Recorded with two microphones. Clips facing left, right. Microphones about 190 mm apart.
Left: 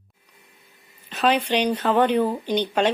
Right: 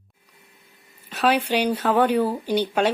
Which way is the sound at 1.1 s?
5° right (ahead or behind).